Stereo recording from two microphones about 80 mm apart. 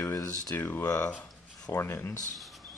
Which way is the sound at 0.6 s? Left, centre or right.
Left.